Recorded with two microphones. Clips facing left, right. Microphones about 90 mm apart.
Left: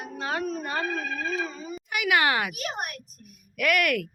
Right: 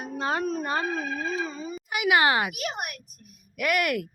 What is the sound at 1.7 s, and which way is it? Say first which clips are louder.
Speech: right 2 dB; 5° right (ahead or behind).